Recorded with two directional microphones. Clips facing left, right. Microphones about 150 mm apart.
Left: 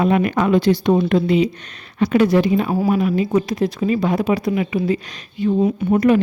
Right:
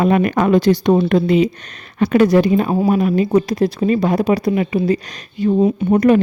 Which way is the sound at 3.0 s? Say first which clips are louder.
Right 3 dB; 45° right (ahead or behind).